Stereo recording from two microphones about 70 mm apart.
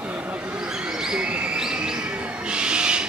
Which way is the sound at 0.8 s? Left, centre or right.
Centre.